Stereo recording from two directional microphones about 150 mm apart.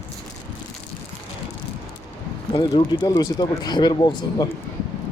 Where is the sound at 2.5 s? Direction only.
30° left (ahead or behind).